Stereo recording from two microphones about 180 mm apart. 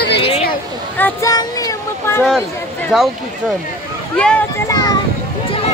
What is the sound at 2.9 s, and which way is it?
Speech, centre (ahead or behind).